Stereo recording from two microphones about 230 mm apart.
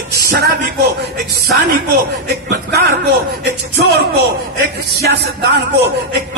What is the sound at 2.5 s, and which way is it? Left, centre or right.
Speech, right.